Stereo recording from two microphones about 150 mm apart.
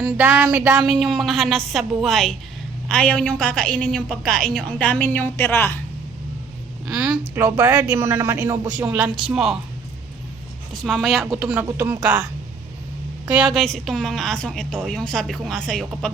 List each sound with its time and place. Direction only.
0.0 s speech: 15° right (ahead or behind)
0.8 s a woman's voice: centre (ahead or behind); by 5.8 s 15° left (ahead or behind)
6.8 s a sound: 5° right (ahead or behind)
7.3 s a woman's voice: 20° right (ahead or behind); by 9.6 s 5° right (ahead or behind)
10.7 s a woman's voice: centre (ahead or behind); by 12.0 s 15° right (ahead or behind)
13.3 s a woman's voice: centre (ahead or behind)